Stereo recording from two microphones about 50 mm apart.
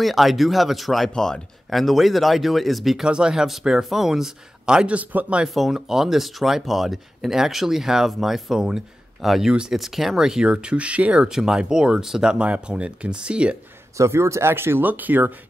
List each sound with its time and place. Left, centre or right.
0.0 s speech: centre
1.1 s speech: centre
1.7 s speech: centre
3.0 s speech: centre
3.4 s speech: centre
4.9 s speech: right
5.5 s speech: centre; by 11.2 s right
11.2 s speech: centre
13.9 s speech: right
14.5 s speech: right
14.9 s speech: right